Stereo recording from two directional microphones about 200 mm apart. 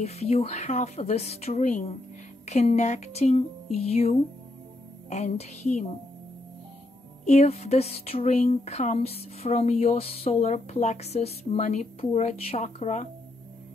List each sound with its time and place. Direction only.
0.0 s speech: 30° left (ahead or behind)
7.2 s speech: 35° left (ahead or behind)